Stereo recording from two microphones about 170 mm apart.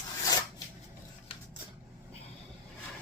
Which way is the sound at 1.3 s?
35° left (ahead or behind).